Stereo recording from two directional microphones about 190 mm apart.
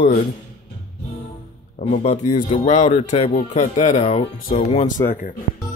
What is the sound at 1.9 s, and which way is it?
Speech, 35° left (ahead or behind).